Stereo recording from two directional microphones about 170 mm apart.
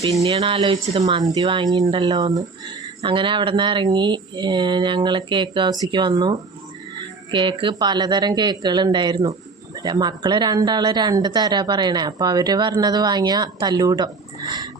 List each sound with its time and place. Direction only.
0.0 s speech: 20° right (ahead or behind)
0.3 s speech: 35° right (ahead or behind)
1.2 s speech: 20° right (ahead or behind)